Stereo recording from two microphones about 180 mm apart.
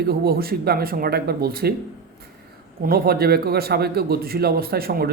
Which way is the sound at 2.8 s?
55° right (ahead or behind).